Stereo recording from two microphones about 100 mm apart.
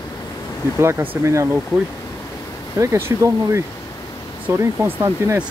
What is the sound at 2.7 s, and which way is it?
Speech, 30° right (ahead or behind).